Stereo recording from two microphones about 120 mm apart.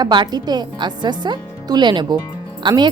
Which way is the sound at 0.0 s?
35° right (ahead or behind).